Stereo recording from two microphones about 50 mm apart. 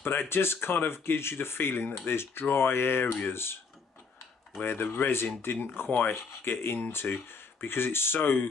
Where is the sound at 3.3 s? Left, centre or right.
Left.